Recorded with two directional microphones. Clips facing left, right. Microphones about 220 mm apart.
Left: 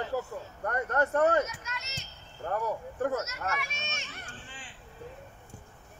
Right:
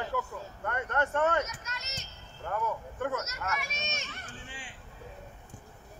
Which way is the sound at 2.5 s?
35° left (ahead or behind).